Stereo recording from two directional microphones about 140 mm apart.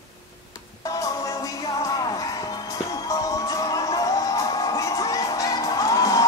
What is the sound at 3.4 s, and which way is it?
Music, 25° left (ahead or behind).